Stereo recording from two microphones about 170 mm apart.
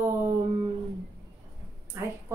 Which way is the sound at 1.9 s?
15° right (ahead or behind).